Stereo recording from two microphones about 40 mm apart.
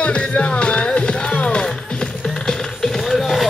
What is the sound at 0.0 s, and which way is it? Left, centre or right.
Music, left.